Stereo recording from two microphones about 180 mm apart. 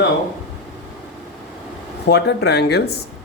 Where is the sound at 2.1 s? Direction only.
70° left (ahead or behind).